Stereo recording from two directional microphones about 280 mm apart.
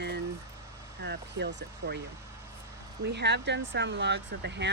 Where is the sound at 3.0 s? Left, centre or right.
Right.